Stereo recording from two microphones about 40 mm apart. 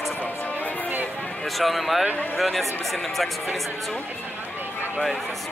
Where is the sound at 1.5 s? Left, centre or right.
Centre.